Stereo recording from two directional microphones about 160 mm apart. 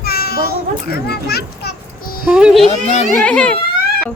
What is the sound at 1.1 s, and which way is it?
Children playing, 85° left.